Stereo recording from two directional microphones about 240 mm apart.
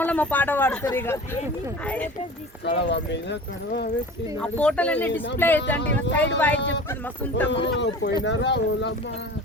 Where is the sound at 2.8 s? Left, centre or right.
Left.